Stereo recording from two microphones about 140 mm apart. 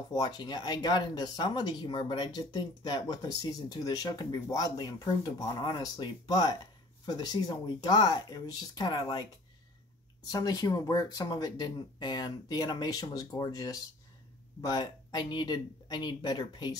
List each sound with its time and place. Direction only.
0.1 s speech: 30° left (ahead or behind)
10.3 s speech: 25° left (ahead or behind)